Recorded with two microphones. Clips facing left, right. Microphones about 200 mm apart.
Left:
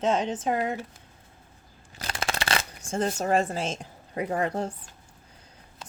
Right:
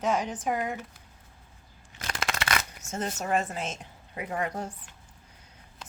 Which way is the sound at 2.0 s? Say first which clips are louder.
Left 2 dB; 30° left (ahead or behind).